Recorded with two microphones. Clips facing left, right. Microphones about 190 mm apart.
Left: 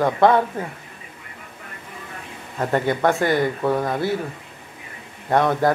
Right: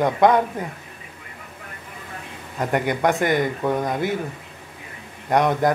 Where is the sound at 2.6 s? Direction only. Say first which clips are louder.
Left 1 dB; 15° right (ahead or behind).